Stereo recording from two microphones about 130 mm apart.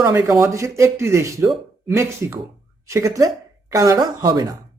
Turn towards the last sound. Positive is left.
turn(degrees=-30)  # may be behind; listen again after turning